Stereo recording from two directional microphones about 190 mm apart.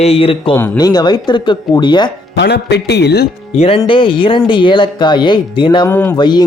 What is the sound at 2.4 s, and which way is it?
Speech, 60° left (ahead or behind).